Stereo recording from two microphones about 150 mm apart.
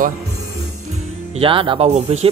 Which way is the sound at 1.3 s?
35° right (ahead or behind).